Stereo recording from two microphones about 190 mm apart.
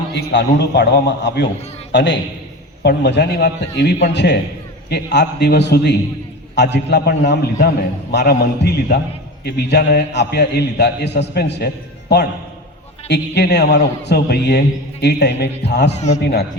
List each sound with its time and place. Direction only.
0.1 s a man's voice: 60° left (ahead or behind)